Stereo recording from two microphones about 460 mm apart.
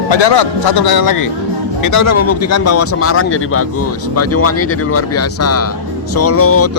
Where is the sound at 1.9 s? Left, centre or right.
Left.